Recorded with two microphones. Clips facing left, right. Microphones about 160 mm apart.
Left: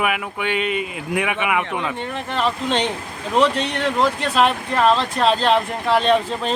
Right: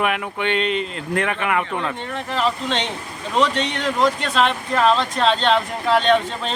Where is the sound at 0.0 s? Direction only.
5° left (ahead or behind).